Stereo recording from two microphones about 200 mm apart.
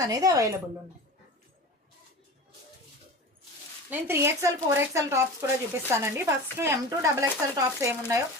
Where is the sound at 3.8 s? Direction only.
10° right (ahead or behind).